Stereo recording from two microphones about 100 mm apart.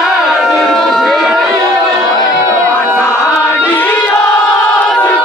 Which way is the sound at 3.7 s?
20° left (ahead or behind).